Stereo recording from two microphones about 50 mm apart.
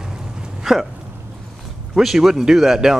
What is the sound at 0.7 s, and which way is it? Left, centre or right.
Hiccup, centre.